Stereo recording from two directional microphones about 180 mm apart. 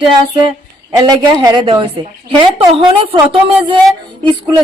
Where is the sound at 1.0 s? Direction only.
25° right (ahead or behind).